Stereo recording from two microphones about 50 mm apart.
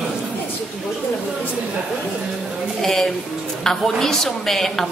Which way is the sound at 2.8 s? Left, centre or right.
Centre.